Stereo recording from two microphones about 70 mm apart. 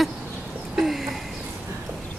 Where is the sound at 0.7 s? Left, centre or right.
Centre.